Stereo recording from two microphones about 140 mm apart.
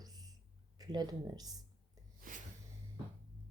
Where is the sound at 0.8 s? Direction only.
30° right (ahead or behind).